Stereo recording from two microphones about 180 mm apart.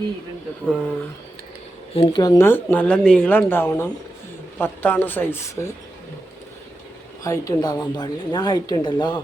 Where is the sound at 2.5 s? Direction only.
10° left (ahead or behind).